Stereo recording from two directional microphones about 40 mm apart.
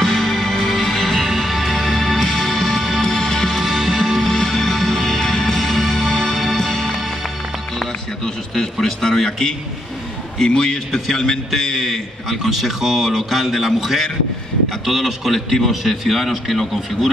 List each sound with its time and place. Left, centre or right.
0.0 s music: centre
1.3 s music: centre
3.6 s music: centre
4.3 s music: centre
4.6 s music: centre
5.6 s music: centre
8.8 s a man's voice: centre
11.7 s a man's voice: centre